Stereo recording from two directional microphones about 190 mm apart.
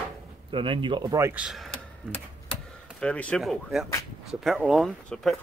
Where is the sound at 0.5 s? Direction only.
25° right (ahead or behind).